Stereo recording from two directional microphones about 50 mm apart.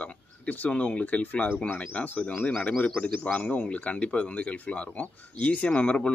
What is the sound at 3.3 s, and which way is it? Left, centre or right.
Speech, left.